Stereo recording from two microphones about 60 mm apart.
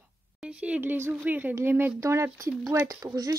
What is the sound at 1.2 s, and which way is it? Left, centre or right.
Speech, right.